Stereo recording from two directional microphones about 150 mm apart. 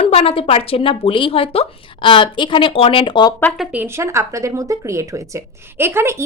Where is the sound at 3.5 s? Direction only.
Centre (ahead or behind).